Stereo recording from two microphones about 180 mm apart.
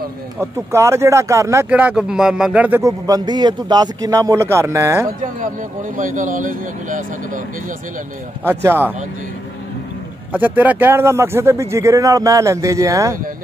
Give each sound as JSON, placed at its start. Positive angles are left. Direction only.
{"t": 0.4, "sound": "speech", "side_deg": -15}
{"t": 5.2, "sound": "speech", "side_deg": -45}
{"t": 8.5, "sound": "speech", "side_deg": -10}
{"t": 10.3, "sound": "speech", "side_deg": -10}